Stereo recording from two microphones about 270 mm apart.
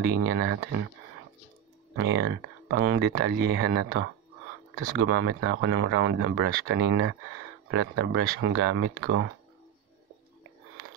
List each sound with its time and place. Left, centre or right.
0.0 s speech: right
2.0 s speech: right